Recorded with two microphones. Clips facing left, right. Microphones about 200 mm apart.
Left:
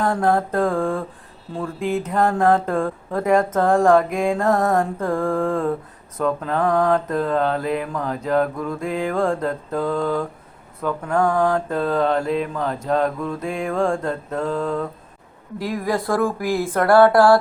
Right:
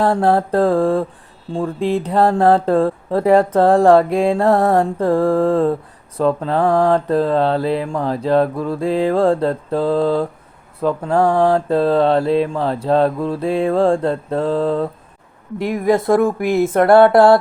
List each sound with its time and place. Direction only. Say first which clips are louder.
0.0 s speech: right 4 dB; 30° right (ahead or behind)